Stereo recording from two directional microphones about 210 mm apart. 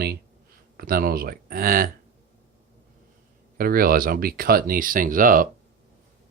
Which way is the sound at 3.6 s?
45° right (ahead or behind).